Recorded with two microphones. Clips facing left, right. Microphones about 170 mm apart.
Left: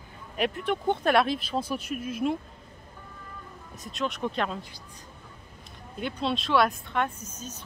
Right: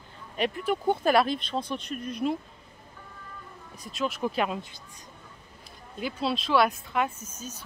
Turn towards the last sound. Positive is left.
turn(degrees=-10)  # may be behind; listen again after turning